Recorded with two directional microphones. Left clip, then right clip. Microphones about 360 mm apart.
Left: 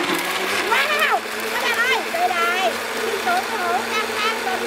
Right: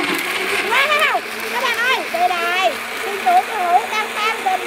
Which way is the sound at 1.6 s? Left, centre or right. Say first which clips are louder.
Right 2 dB; centre.